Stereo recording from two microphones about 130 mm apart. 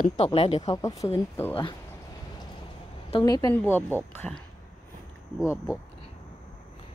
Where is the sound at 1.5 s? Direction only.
40° left (ahead or behind).